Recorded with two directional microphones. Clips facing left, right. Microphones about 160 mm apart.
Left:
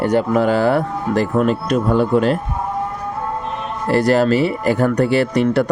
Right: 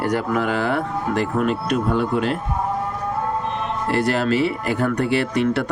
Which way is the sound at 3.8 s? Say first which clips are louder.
Left 6 dB; 40° left (ahead or behind).